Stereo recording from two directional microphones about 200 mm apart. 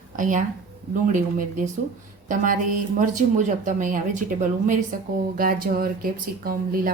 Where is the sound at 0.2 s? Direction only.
40° right (ahead or behind).